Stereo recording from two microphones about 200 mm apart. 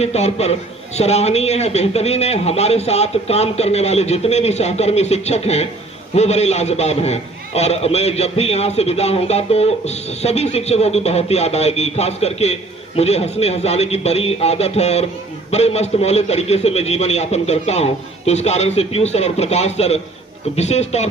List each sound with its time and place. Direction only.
0.0 s a man's voice: 30° left (ahead or behind)